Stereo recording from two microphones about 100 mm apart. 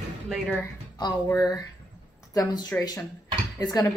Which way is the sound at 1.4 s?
40° left (ahead or behind).